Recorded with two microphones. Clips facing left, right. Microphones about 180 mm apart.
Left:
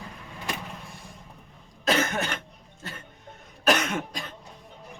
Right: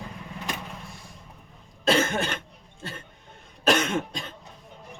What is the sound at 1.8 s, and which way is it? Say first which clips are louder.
Cough: right 2 dB; 30° right (ahead or behind).